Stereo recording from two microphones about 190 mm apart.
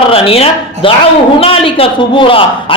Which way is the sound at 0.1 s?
30° left (ahead or behind).